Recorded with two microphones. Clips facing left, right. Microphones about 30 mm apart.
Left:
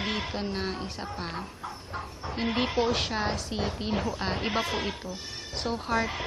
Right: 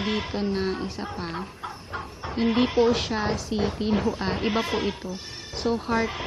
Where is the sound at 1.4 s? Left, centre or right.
Right.